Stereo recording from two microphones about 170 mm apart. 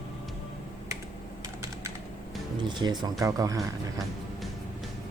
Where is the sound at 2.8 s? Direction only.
25° right (ahead or behind).